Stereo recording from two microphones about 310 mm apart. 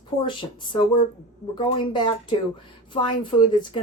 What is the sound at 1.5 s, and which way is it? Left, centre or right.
A woman's voice, centre.